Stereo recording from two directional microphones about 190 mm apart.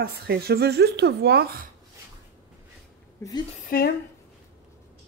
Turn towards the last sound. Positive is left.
turn(degrees=50)  # may be behind; listen again after turning